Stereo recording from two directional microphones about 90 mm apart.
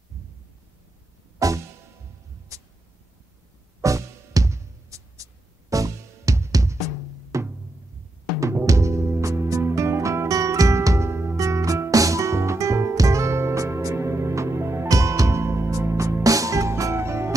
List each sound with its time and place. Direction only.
1.4 s music: 35° right (ahead or behind)
3.8 s music: 40° right (ahead or behind)